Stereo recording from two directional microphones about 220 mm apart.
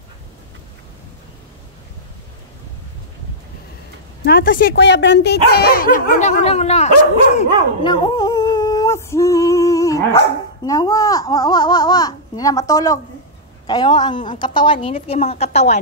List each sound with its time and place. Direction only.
4.2 s a woman's voice: 40° left (ahead or behind)